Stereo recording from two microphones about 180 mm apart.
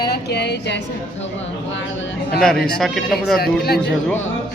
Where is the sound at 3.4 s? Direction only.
60° left (ahead or behind).